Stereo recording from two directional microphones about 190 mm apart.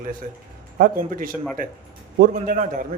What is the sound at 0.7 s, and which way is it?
A man's voice, 45° right (ahead or behind).